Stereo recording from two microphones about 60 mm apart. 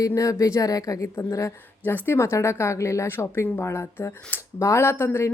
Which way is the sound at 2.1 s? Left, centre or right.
Left.